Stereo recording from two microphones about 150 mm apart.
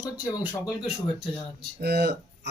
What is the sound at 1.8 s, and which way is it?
Speech, 90° right.